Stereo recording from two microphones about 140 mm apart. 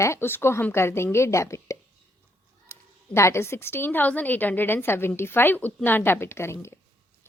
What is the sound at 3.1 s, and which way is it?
A woman's voice, 20° left (ahead or behind).